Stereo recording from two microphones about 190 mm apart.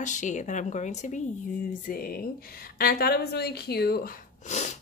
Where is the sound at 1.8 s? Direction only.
50° left (ahead or behind).